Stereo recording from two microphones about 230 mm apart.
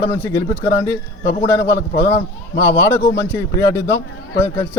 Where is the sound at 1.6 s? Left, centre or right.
Left.